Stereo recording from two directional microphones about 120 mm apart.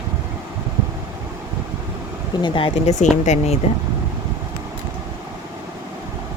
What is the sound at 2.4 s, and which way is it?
Speech, 45° left (ahead or behind).